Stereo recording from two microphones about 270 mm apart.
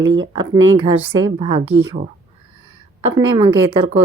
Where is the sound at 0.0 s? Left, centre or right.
Right.